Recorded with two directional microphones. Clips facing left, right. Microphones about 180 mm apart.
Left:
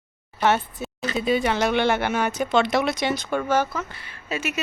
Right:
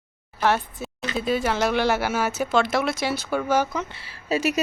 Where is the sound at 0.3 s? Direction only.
Centre (ahead or behind).